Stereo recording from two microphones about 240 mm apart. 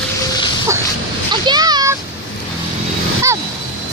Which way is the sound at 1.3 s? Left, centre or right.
Centre.